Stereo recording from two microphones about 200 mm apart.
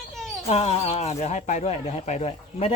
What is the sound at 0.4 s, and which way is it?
Speech, 30° left (ahead or behind).